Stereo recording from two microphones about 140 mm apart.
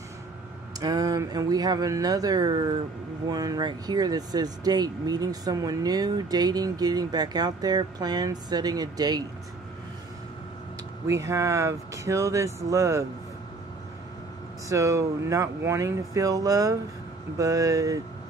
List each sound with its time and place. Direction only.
0.7 s speech: 25° right (ahead or behind)
11.1 s speech: 20° right (ahead or behind)
14.7 s speech: 25° right (ahead or behind)